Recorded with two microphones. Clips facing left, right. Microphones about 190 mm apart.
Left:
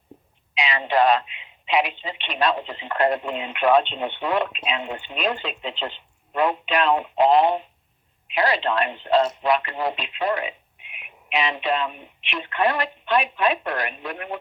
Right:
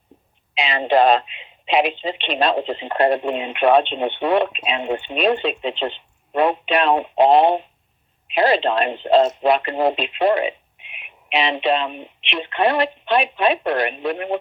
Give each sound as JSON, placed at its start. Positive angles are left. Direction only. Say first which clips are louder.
{"t": 0.5, "sound": "speech", "louder": "right 5 dB", "side_deg": -30}
{"t": 10.2, "sound": "radio", "louder": "right 7 dB", "side_deg": -25}
{"t": 12.2, "sound": "speech", "louder": "right 3 dB", "side_deg": -25}